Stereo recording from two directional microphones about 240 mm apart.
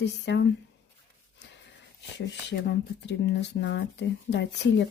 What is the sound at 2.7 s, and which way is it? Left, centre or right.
Speech, left.